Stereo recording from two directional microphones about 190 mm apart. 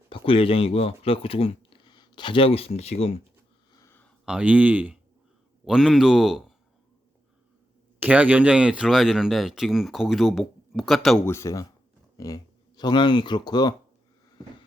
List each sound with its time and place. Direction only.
0.1 s speech: 30° left (ahead or behind)
3.8 s a sound: 10° left (ahead or behind)
4.3 s speech: 5° right (ahead or behind)
7.9 s speech: 10° right (ahead or behind)
11.3 s speech: 15° left (ahead or behind)